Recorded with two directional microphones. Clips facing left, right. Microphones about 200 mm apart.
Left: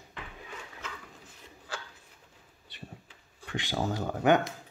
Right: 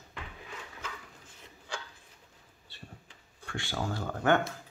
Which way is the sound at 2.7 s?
20° left (ahead or behind).